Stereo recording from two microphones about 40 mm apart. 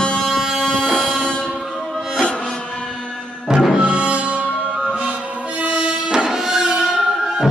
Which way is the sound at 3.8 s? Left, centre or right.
Right.